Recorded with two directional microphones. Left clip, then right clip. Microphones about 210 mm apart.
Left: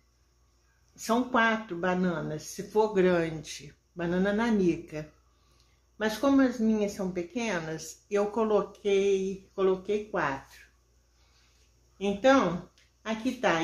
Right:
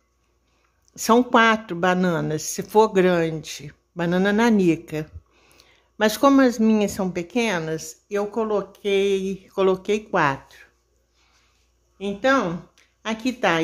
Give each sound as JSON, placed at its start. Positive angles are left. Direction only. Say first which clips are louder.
{"t": 0.9, "sound": "speech", "louder": "right 10 dB", "side_deg": -50}
{"t": 12.0, "sound": "speech", "louder": "right 3 dB", "side_deg": -25}
{"t": 13.0, "sound": "speech", "louder": "right 6 dB", "side_deg": -40}